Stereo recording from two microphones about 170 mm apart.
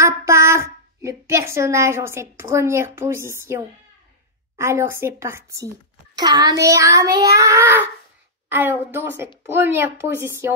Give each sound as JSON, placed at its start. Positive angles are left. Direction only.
{"t": 0.0, "sound": "a child's voice", "side_deg": -15}
{"t": 6.1, "sound": "child singing", "side_deg": -25}
{"t": 8.5, "sound": "a woman's voice", "side_deg": -10}